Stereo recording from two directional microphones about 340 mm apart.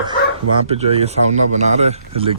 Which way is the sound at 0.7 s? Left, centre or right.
Centre.